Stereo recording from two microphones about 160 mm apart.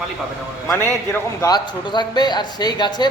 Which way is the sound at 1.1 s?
20° left (ahead or behind).